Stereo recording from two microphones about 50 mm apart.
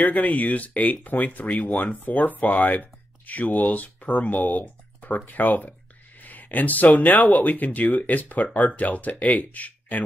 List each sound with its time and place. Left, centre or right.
0.0 s speech: left